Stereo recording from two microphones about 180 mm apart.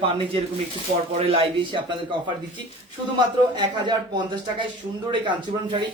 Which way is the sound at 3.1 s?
25° right (ahead or behind).